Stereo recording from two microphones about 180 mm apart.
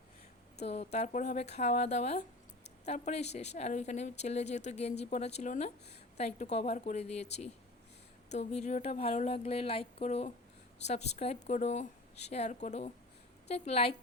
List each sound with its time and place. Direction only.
0.6 s speech: 35° left (ahead or behind)